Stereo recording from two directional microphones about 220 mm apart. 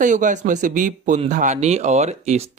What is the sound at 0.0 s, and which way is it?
Speech, 35° right (ahead or behind).